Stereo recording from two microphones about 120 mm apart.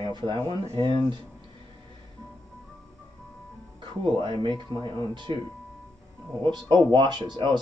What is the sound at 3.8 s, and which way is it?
Speech, 40° right (ahead or behind).